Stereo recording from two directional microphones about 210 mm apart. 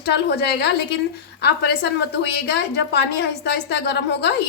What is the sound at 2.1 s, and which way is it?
A woman's voice, 50° left (ahead or behind).